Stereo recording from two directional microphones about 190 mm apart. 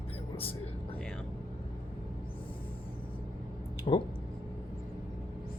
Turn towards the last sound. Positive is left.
turn(degrees=30)  # may be behind; listen again after turning